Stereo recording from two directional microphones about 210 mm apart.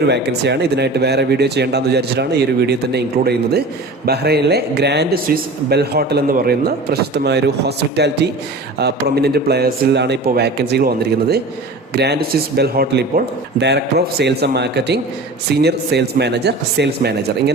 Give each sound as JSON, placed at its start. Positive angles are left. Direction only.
{"t": 0.0, "sound": "speech", "side_deg": -55}